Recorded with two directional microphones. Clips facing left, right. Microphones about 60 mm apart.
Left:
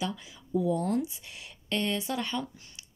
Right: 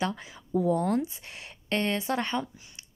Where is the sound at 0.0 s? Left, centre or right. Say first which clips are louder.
Right 3 dB; right.